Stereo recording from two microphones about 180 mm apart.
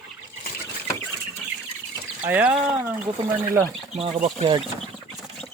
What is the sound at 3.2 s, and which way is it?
Speech, 20° right (ahead or behind).